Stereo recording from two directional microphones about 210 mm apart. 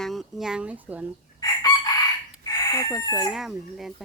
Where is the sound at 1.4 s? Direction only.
20° left (ahead or behind).